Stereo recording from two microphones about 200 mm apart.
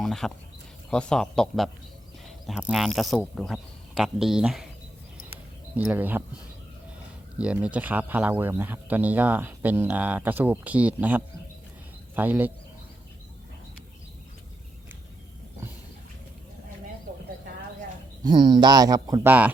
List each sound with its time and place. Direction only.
0.0 s a sound: centre (ahead or behind)
0.9 s speech: 5° left (ahead or behind)
5.7 s speech: 5° right (ahead or behind)
7.3 s speech: 5° right (ahead or behind)
18.2 s speech: 20° right (ahead or behind)